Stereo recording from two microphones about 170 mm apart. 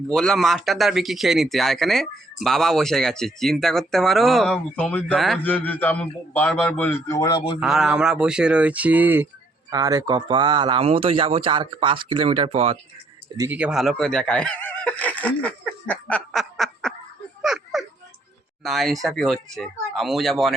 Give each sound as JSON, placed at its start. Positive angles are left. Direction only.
{"t": 0.1, "sound": "speech", "side_deg": 0}
{"t": 7.6, "sound": "speech", "side_deg": -5}
{"t": 9.6, "sound": "speech", "side_deg": -20}
{"t": 13.4, "sound": "speech", "side_deg": -10}
{"t": 17.4, "sound": "children playing", "side_deg": 0}
{"t": 18.6, "sound": "speech", "side_deg": 0}